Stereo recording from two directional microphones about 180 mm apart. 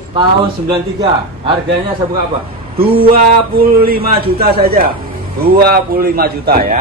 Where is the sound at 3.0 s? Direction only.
55° right (ahead or behind).